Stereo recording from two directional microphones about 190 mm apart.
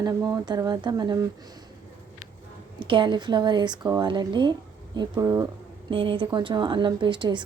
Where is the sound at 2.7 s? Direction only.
25° right (ahead or behind).